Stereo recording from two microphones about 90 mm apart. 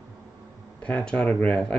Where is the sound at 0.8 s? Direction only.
15° left (ahead or behind).